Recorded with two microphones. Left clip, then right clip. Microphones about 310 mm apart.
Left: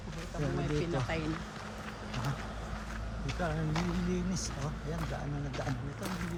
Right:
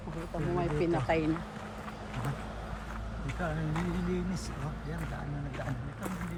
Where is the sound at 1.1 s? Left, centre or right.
Right.